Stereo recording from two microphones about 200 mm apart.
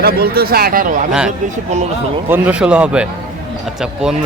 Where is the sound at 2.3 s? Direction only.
5° right (ahead or behind).